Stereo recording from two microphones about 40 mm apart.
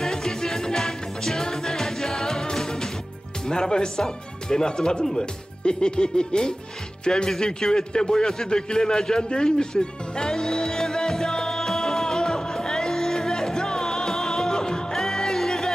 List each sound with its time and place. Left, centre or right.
0.0 s music: centre
3.4 s speech: centre
8.5 s music: centre